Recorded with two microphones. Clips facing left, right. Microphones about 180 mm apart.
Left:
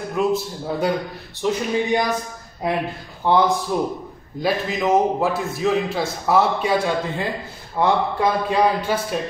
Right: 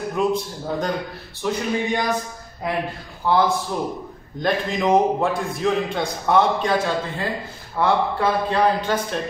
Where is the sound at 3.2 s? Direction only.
20° left (ahead or behind).